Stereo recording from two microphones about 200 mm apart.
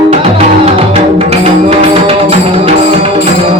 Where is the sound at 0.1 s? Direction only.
30° right (ahead or behind).